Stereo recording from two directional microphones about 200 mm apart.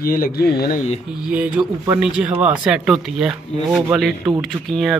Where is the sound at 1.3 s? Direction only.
5° right (ahead or behind).